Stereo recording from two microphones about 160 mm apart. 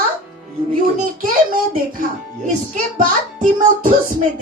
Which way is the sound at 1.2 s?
60° right (ahead or behind).